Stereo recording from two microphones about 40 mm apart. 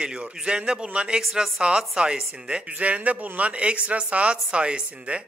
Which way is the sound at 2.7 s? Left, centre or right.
Right.